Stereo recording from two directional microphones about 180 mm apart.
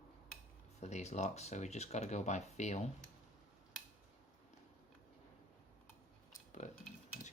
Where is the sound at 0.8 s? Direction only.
40° left (ahead or behind).